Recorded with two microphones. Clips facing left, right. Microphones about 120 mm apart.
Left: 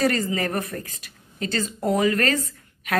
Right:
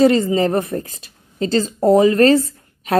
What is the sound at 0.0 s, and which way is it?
A woman's voice, 25° right (ahead or behind).